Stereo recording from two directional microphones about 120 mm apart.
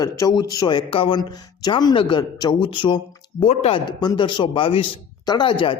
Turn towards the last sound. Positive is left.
turn(degrees=45)  # may be behind; listen again after turning